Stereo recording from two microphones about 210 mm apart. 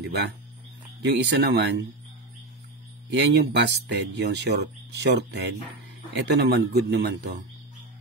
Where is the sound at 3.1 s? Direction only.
50° right (ahead or behind).